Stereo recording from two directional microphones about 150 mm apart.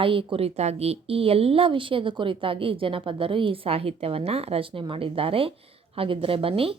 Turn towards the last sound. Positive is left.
turn(degrees=-35)  # may be behind; listen again after turning